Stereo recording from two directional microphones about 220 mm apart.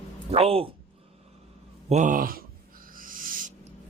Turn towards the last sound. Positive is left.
turn(degrees=-35)  # may be behind; listen again after turning